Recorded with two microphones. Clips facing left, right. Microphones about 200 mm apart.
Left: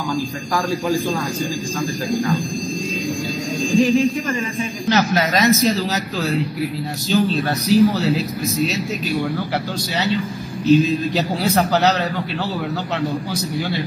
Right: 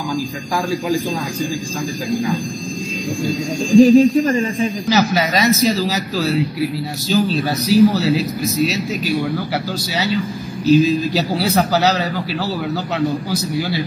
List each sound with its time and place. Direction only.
3.7 s speech: 40° right (ahead or behind)
4.8 s speech: centre (ahead or behind)
10.7 s speech: centre (ahead or behind)